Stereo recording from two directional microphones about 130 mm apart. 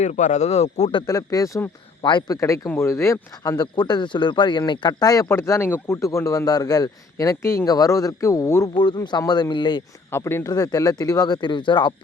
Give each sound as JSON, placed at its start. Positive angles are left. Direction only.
{"t": 0.0, "sound": "speech", "side_deg": 70}
{"t": 1.0, "sound": "speech", "side_deg": 25}
{"t": 2.0, "sound": "speech", "side_deg": 35}
{"t": 8.7, "sound": "speech", "side_deg": 40}
{"t": 10.1, "sound": "speech", "side_deg": 20}
{"t": 10.5, "sound": "speech", "side_deg": 30}